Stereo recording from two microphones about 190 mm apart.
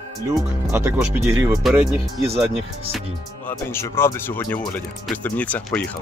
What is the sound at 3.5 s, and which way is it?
Speech, 15° left (ahead or behind).